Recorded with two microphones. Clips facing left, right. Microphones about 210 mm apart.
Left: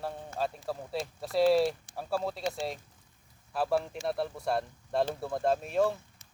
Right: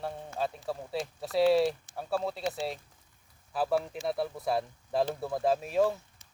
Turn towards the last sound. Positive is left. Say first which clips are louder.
# right 1 dB
turn(degrees=0)  # may be behind; listen again after turning